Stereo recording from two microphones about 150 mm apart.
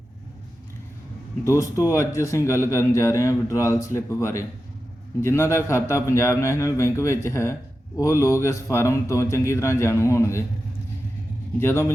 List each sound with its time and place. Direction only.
1.5 s speech: 20° left (ahead or behind)
11.6 s a man's voice: 15° left (ahead or behind)